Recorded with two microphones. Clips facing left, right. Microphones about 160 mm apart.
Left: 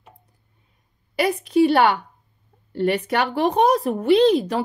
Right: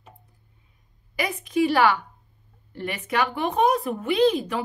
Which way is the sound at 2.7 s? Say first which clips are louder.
Left 7 dB; 35° left (ahead or behind).